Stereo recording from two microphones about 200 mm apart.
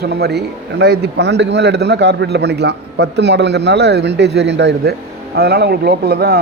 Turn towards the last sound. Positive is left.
turn(degrees=-50)  # may be behind; listen again after turning